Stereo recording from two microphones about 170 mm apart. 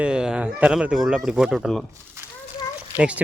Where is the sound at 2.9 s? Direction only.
10° right (ahead or behind).